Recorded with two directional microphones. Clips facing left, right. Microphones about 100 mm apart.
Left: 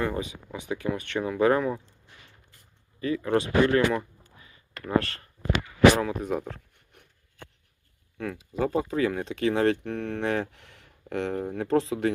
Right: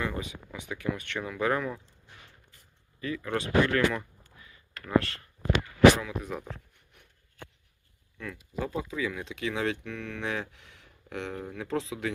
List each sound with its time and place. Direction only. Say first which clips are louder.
0.0 s speech: left 5 dB; 30° left (ahead or behind)
3.2 s speech: left 3 dB; 25° left (ahead or behind)
3.9 s a sound: left 6 dB; 35° left (ahead or behind)
6.0 s speech: left 7 dB; 50° left (ahead or behind)
8.2 s speech: left 7 dB; 60° left (ahead or behind)